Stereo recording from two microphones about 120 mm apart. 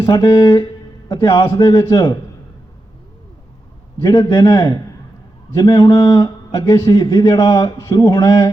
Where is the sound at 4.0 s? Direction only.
35° left (ahead or behind).